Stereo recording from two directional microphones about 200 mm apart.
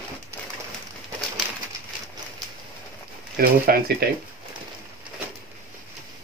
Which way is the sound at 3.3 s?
50° right (ahead or behind).